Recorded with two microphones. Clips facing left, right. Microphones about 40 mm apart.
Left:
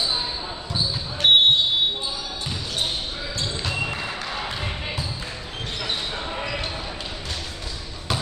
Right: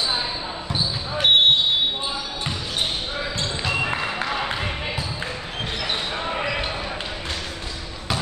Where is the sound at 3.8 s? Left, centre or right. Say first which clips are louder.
Right 4 dB; right.